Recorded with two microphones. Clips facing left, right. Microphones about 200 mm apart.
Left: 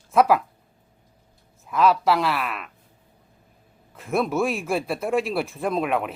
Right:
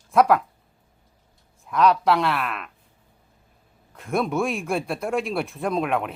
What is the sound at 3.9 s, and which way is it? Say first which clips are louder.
Speech: left 1 dB; centre (ahead or behind).